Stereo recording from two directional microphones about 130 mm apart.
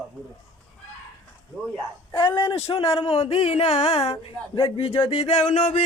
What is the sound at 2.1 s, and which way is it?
Speech, 40° left (ahead or behind).